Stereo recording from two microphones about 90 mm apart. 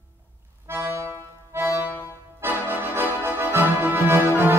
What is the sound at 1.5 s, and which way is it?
Music, 25° right (ahead or behind).